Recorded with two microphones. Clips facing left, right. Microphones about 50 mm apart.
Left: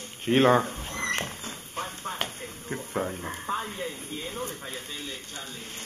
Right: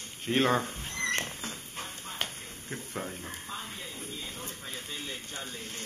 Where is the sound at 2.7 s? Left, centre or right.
Left.